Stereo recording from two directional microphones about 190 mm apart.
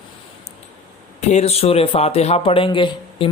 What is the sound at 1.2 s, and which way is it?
Speech, 35° left (ahead or behind).